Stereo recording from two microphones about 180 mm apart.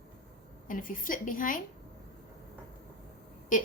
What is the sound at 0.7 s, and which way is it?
Speech, 50° left (ahead or behind).